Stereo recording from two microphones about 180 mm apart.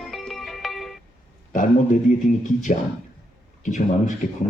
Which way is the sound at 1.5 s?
45° left (ahead or behind).